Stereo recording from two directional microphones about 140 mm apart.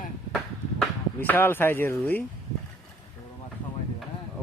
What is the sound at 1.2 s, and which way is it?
Speech, 15° left (ahead or behind).